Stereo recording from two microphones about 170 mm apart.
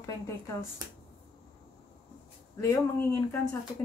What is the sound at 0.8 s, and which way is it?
Speech, 20° right (ahead or behind).